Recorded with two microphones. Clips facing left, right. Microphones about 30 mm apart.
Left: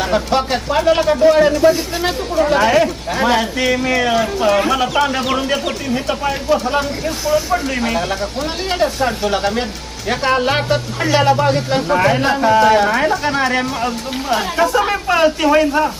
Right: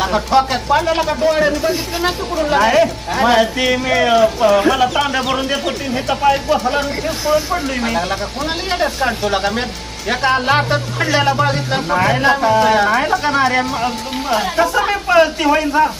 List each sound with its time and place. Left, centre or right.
0.1 s speech: centre
7.3 s speech: right
7.9 s speech: centre